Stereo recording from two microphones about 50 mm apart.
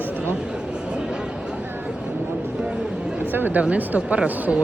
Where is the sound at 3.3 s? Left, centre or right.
Right.